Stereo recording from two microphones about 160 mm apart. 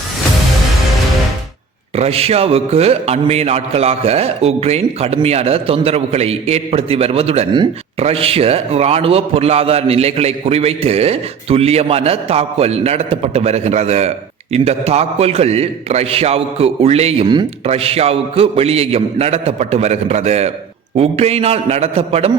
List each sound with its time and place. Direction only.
2.0 s a man's voice: 40° right (ahead or behind)